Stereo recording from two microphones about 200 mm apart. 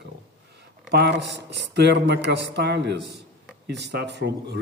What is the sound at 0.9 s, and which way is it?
Speech, 60° right (ahead or behind).